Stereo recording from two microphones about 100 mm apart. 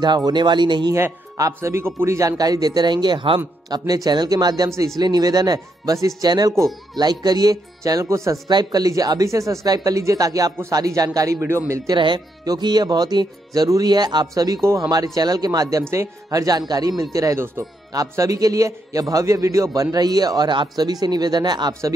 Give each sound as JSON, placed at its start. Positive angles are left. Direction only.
{"t": 0.0, "sound": "speech", "side_deg": -50}
{"t": 0.9, "sound": "a man's voice", "side_deg": -30}
{"t": 4.7, "sound": "a man's voice", "side_deg": -30}
{"t": 5.0, "sound": "a man's voice", "side_deg": -45}
{"t": 8.5, "sound": "a man's voice", "side_deg": -45}
{"t": 12.0, "sound": "a man's voice", "side_deg": -50}